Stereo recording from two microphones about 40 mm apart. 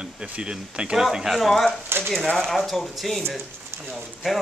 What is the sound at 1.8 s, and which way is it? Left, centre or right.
Speech, right.